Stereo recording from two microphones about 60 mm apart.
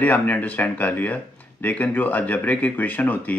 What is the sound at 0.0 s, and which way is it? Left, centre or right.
A man's voice, left.